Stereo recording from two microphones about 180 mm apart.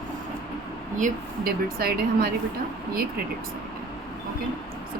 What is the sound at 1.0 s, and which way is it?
Speech, 55° right (ahead or behind).